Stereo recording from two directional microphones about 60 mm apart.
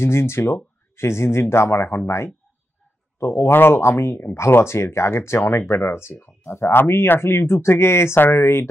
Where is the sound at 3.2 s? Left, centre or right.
Left.